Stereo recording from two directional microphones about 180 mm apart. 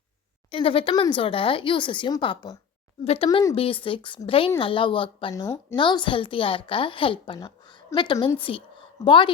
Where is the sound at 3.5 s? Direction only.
30° left (ahead or behind).